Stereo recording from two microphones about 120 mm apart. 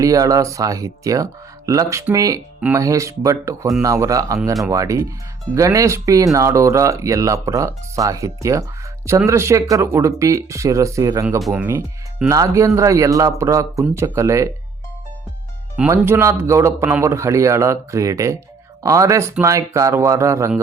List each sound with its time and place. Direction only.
0.0 s speech: 30° right (ahead or behind)
11.5 s speech: 15° right (ahead or behind)
12.3 s speech: 25° right (ahead or behind)
15.9 s speech: 20° right (ahead or behind)